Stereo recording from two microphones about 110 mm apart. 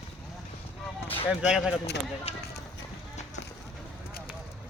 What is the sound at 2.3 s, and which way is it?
Speech, 60° left (ahead or behind).